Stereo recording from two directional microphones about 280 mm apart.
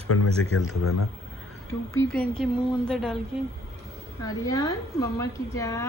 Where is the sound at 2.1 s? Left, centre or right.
Centre.